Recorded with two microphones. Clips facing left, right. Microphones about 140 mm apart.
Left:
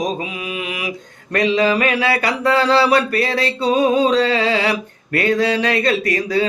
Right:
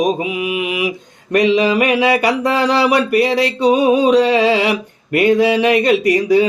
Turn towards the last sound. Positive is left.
turn(degrees=-15)  # may be behind; listen again after turning